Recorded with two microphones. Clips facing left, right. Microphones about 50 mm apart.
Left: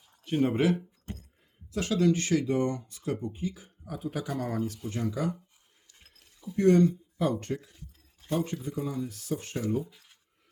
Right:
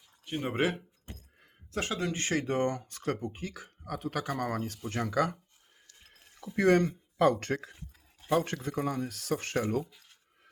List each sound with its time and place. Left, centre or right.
0.3 s speech: centre
0.5 s speech: right
3.3 s speech: right
6.3 s speech: right
8.3 s speech: right
9.9 s a sound: centre